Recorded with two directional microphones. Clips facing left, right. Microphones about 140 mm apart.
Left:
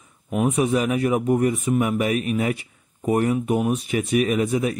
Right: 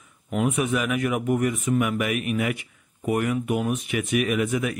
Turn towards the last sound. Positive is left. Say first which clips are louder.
# left 3 dB
turn(degrees=30)  # may be behind; listen again after turning